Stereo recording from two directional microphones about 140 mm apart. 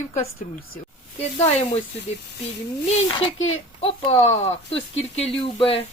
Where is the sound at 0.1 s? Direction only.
50° left (ahead or behind).